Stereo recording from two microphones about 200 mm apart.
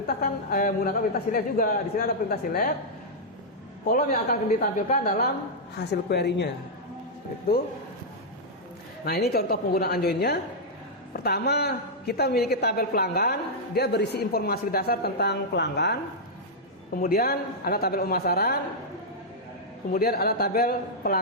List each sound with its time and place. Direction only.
0.1 s a woman's voice: 45° left (ahead or behind)
3.8 s a woman's voice: 45° left (ahead or behind)
5.9 s a woman's voice: 55° left (ahead or behind)
9.0 s a woman's voice: 50° left (ahead or behind)
16.9 s a woman's voice: 50° left (ahead or behind)
19.9 s a woman's voice: 50° left (ahead or behind)